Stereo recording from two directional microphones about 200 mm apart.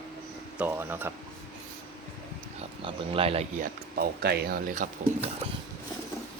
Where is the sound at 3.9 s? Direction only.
50° right (ahead or behind).